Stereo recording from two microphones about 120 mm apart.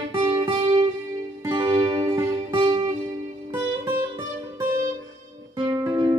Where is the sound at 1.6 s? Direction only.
25° right (ahead or behind).